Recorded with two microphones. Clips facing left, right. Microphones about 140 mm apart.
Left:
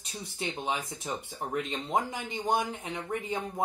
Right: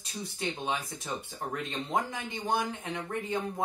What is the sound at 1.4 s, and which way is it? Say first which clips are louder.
Speech: left 4 dB; 15° left (ahead or behind).